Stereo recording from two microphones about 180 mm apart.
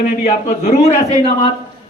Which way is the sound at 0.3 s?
45° left (ahead or behind).